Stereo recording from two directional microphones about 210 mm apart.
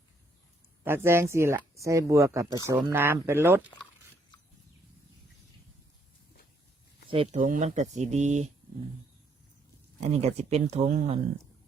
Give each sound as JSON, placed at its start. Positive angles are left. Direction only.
{"t": 0.9, "sound": "speech", "side_deg": -10}
{"t": 7.1, "sound": "speech", "side_deg": -30}
{"t": 10.0, "sound": "speech", "side_deg": -30}